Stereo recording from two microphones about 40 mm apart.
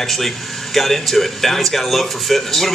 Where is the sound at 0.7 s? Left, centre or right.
Centre.